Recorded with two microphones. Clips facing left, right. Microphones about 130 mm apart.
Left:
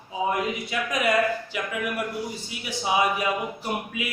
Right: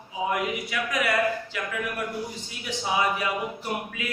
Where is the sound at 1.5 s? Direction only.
15° left (ahead or behind).